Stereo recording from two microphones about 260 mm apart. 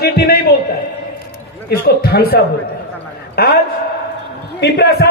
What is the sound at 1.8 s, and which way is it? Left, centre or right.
A man's voice, left.